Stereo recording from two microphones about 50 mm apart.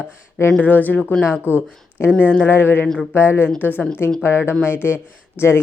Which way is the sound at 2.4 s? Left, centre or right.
Left.